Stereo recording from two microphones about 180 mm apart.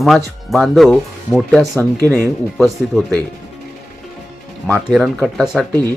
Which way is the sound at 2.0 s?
10° left (ahead or behind).